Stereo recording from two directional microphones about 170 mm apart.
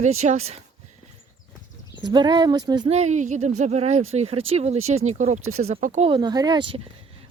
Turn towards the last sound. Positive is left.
turn(degrees=-30)  # may be behind; listen again after turning